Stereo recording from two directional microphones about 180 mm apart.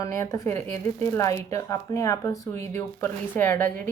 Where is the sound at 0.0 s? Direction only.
15° left (ahead or behind).